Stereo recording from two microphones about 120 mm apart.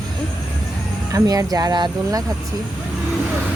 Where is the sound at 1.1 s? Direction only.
30° right (ahead or behind).